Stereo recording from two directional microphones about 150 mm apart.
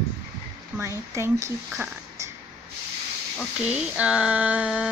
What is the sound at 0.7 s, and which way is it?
A woman's voice, 20° right (ahead or behind).